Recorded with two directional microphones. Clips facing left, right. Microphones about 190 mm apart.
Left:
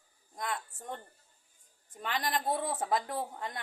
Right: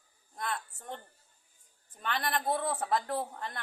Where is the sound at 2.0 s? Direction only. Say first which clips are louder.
Even; 15° left (ahead or behind).